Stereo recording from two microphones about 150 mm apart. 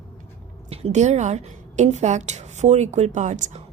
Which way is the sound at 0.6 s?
45° right (ahead or behind).